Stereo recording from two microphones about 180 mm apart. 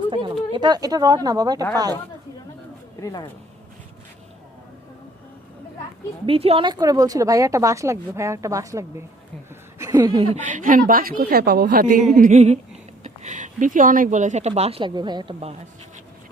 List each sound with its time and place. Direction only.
0.1 s speech: 25° right (ahead or behind)
3.0 s speech: 20° left (ahead or behind)
6.2 s a woman's voice: 30° right (ahead or behind)
10.3 s a woman's voice: 45° right (ahead or behind)